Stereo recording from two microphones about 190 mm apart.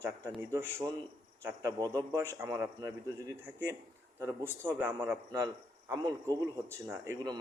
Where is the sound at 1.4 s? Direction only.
15° right (ahead or behind).